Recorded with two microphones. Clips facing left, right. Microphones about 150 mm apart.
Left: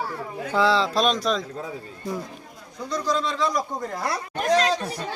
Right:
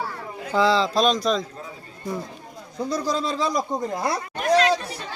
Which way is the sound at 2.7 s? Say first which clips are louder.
Right 1 dB; 30° right (ahead or behind).